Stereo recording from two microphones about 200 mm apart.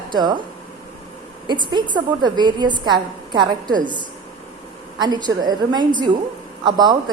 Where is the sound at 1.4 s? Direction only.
25° right (ahead or behind).